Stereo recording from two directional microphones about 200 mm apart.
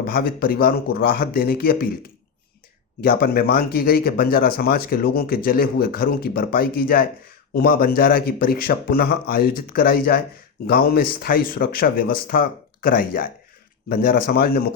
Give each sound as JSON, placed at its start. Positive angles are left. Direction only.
{"t": 0.0, "sound": "speech", "side_deg": 50}
{"t": 3.0, "sound": "speech", "side_deg": 50}